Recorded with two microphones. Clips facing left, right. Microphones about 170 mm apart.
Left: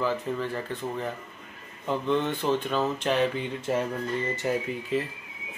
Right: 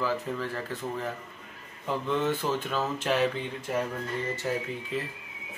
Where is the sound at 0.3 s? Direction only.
Centre (ahead or behind).